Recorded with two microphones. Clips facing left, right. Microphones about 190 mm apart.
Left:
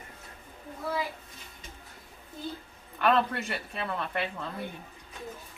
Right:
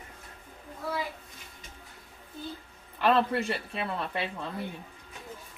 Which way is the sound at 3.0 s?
30° right (ahead or behind).